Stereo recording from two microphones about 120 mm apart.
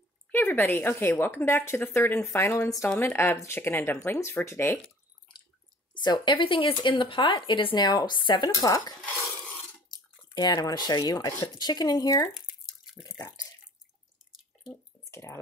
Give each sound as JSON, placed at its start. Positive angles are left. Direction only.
{"t": 0.3, "sound": "a woman's voice", "side_deg": 15}
{"t": 5.9, "sound": "speech", "side_deg": 40}
{"t": 9.0, "sound": "dishes", "side_deg": 15}
{"t": 9.8, "sound": "speech", "side_deg": 35}
{"t": 12.4, "sound": "drip", "side_deg": 0}
{"t": 15.0, "sound": "drip", "side_deg": 20}